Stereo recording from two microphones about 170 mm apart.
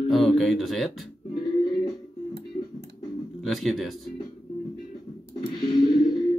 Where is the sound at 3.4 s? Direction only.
Centre (ahead or behind).